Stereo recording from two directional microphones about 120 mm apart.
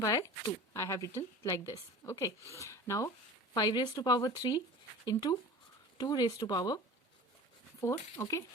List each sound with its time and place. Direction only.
0.0 s a woman's voice: 30° left (ahead or behind)
7.8 s a woman's voice: 25° left (ahead or behind)